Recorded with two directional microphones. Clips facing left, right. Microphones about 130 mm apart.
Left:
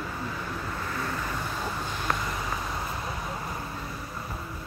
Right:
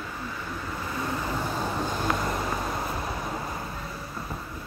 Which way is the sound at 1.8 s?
40° right (ahead or behind).